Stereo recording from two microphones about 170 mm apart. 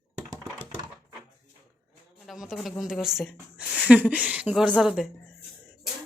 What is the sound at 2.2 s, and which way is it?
A woman's voice, centre (ahead or behind).